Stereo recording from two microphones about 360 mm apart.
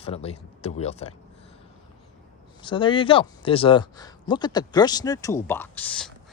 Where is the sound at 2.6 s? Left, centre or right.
Centre.